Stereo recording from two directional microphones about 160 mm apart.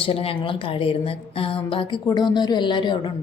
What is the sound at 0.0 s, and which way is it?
A woman's voice, 35° left (ahead or behind).